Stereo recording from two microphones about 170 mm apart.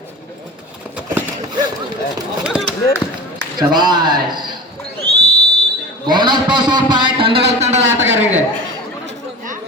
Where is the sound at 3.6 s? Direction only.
25° right (ahead or behind).